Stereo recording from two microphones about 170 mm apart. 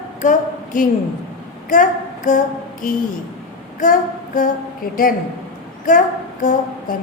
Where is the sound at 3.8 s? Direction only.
50° left (ahead or behind).